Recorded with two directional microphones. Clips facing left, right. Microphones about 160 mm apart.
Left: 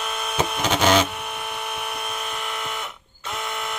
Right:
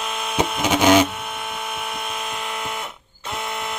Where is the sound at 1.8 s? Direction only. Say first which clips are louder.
Right 1 dB; 10° left (ahead or behind).